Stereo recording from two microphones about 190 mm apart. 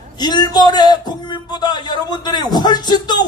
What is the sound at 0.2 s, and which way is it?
A man's voice, 20° left (ahead or behind).